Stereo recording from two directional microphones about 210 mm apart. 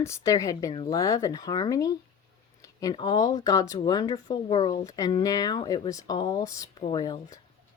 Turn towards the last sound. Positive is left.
turn(degrees=20)  # may be behind; listen again after turning